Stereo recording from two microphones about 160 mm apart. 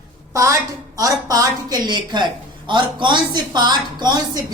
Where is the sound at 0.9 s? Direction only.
20° right (ahead or behind).